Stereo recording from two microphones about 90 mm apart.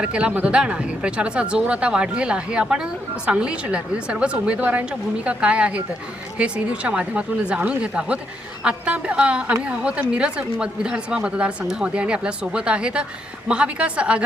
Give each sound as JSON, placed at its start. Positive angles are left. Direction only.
{"t": 0.0, "sound": "speech", "side_deg": -15}